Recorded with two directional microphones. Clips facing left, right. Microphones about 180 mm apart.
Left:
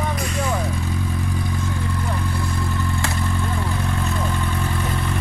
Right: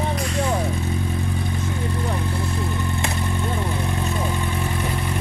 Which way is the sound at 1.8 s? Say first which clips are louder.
Right 1 dB; 25° right (ahead or behind).